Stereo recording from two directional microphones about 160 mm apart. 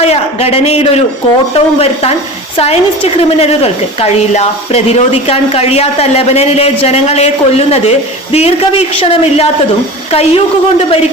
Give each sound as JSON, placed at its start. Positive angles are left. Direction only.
{"t": 0.0, "sound": "a woman's voice", "side_deg": 40}